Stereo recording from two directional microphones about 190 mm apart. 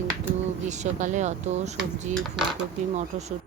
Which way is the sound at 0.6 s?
40° right (ahead or behind).